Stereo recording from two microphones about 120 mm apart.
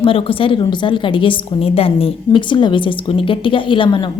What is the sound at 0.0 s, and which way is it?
A woman's voice, 45° left (ahead or behind).